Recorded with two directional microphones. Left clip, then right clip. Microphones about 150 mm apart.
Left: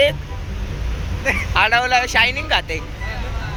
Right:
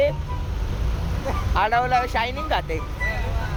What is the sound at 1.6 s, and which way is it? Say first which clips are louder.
Speech: left 4 dB; 15° right (ahead or behind).